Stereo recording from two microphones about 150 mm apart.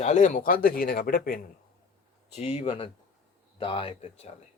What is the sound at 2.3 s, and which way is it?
A man's voice, 40° left (ahead or behind).